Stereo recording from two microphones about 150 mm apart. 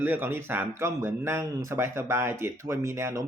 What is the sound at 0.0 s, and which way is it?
Speech, 15° right (ahead or behind).